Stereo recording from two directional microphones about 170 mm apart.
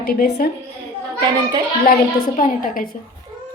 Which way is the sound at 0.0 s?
65° left (ahead or behind).